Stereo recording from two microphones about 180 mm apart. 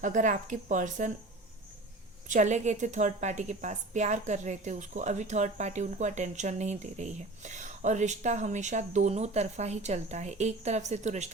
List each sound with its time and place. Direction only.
0.0 s a woman's voice: 45° right (ahead or behind)
2.2 s a woman's voice: 45° right (ahead or behind)